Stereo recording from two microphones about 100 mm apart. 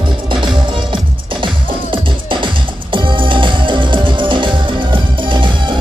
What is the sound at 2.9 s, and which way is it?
Music, 55° right (ahead or behind).